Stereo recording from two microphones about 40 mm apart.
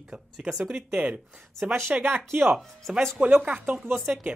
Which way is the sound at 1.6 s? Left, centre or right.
Right.